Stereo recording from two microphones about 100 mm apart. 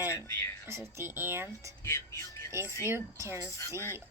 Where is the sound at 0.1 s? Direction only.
25° left (ahead or behind).